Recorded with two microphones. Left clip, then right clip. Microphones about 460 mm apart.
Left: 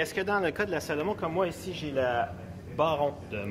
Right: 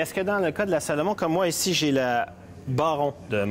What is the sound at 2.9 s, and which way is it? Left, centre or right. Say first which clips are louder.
Speech: right 4 dB; right.